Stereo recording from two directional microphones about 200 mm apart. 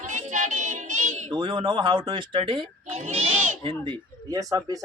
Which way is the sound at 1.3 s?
25° right (ahead or behind).